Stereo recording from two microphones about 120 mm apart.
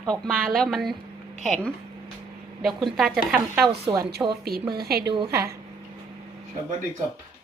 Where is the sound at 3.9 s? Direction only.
30° right (ahead or behind).